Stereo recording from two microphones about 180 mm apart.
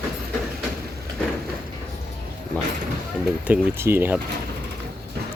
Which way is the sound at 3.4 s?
10° right (ahead or behind).